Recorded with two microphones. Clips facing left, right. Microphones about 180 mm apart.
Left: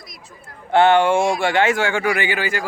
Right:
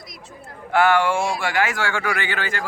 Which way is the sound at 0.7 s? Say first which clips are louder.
Left 4 dB; 25° left (ahead or behind).